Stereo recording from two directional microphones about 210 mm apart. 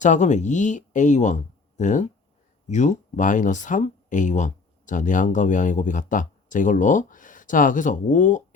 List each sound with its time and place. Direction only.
0.0 s speech: 35° left (ahead or behind)